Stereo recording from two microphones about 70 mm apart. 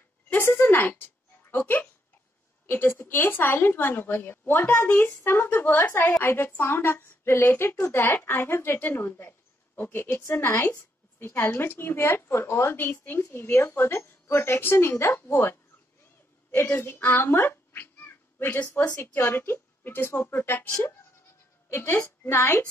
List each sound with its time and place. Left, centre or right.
0.3 s a woman's voice: left
22.2 s a woman's voice: left